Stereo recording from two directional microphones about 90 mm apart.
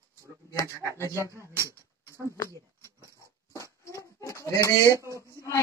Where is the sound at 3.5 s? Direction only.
35° left (ahead or behind).